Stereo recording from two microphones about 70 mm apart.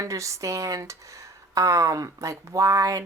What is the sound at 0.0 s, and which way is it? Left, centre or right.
Speech, right.